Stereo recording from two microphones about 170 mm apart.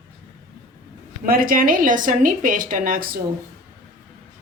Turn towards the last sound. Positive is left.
turn(degrees=-55)  # may be behind; listen again after turning